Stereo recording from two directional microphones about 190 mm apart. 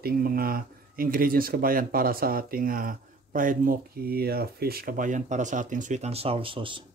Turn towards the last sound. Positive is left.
turn(degrees=-25)  # may be behind; listen again after turning